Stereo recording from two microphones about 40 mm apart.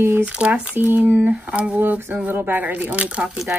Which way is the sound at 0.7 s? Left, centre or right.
Right.